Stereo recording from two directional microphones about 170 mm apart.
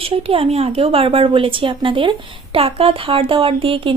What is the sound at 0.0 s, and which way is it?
Speech, 35° right (ahead or behind).